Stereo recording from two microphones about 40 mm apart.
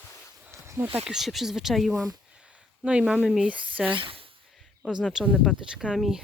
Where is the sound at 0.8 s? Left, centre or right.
Right.